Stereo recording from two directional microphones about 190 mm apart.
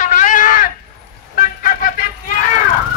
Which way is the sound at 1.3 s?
45° left (ahead or behind).